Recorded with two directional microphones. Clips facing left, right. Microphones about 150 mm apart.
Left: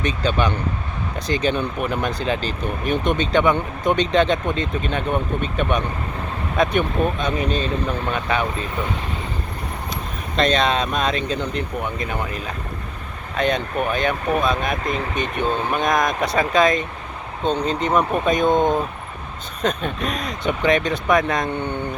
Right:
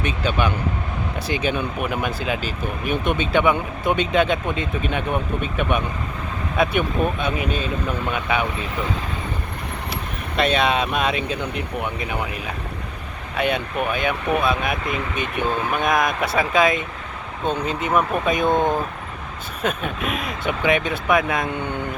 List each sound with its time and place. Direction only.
0.0 s speech: 10° right (ahead or behind)
10.3 s speech: 10° right (ahead or behind)
14.8 s speech: 40° left (ahead or behind)
15.7 s speech: 5° right (ahead or behind)
19.6 s speech: 5° right (ahead or behind)